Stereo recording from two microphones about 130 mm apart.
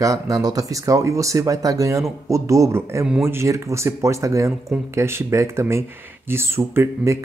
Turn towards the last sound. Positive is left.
turn(degrees=-20)  # may be behind; listen again after turning